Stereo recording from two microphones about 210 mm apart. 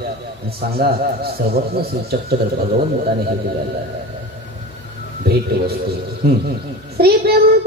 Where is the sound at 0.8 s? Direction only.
50° right (ahead or behind).